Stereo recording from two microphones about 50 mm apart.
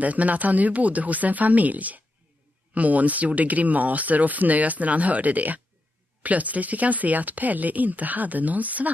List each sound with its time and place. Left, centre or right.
0.0 s speech: right